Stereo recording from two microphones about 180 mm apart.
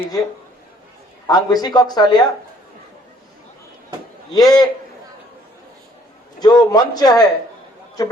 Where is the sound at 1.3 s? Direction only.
20° left (ahead or behind).